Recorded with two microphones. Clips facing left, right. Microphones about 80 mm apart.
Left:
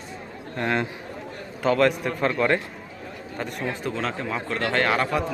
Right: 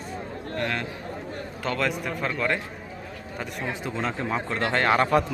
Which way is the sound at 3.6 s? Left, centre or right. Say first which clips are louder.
Left 1 dB; centre.